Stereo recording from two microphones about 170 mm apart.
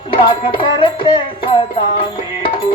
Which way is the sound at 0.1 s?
30° left (ahead or behind).